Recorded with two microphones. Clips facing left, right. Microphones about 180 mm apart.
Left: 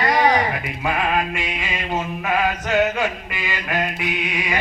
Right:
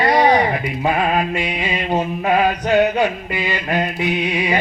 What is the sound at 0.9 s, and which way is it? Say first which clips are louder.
Mantra: right 3 dB; 25° right (ahead or behind).